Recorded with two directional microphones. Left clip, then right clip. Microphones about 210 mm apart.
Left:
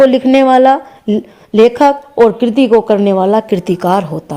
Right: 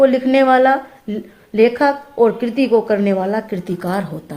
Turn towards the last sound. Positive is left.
turn(degrees=35)  # may be behind; listen again after turning